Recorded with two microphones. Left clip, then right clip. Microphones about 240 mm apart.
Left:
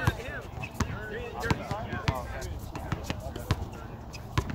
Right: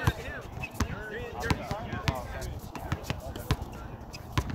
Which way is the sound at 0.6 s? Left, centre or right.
Right.